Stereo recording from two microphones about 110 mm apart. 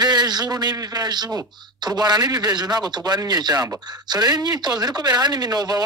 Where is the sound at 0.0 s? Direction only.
40° right (ahead or behind).